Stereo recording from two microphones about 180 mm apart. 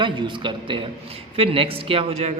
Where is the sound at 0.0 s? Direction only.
25° right (ahead or behind).